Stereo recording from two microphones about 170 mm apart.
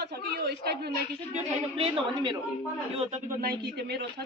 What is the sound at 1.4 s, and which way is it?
Speech, 30° right (ahead or behind).